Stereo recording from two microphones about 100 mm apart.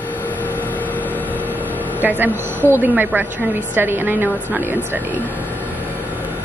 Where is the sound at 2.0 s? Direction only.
20° right (ahead or behind).